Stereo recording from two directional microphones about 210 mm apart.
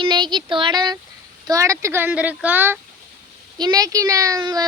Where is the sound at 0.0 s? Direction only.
20° right (ahead or behind).